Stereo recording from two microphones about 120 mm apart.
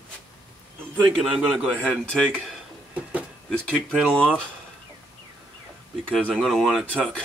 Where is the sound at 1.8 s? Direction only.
10° left (ahead or behind).